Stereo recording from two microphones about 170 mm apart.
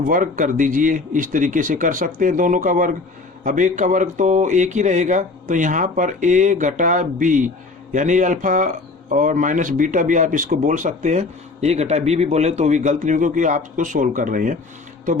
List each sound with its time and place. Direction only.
0.1 s speech: 50° right (ahead or behind)